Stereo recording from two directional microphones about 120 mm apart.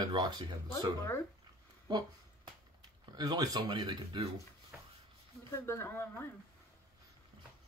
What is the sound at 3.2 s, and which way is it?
Speech, 30° right (ahead or behind).